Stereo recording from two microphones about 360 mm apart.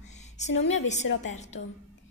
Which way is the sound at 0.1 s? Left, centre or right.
Centre.